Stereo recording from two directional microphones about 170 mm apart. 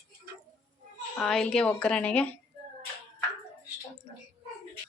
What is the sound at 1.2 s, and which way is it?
A woman's voice, 5° left (ahead or behind).